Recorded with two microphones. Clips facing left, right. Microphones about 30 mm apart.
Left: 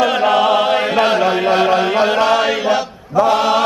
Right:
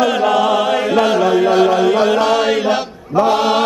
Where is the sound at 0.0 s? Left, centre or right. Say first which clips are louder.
Even; left.